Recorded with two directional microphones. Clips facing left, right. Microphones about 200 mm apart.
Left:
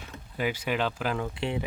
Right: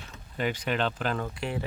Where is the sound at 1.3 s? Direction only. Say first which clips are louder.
Left 2 dB; 25° left (ahead or behind).